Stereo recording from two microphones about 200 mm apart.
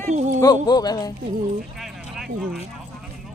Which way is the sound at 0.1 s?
35° right (ahead or behind).